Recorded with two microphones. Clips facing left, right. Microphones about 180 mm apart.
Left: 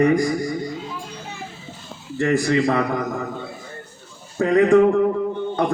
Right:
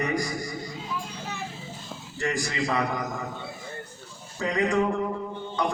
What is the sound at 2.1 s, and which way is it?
A man's voice, 55° left (ahead or behind).